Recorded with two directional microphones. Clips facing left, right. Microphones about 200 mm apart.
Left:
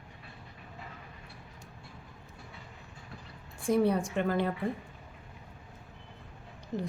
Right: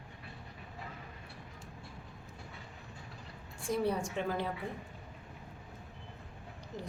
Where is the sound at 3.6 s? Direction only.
60° left (ahead or behind).